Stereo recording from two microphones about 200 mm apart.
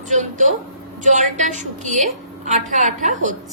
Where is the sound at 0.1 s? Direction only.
35° right (ahead or behind).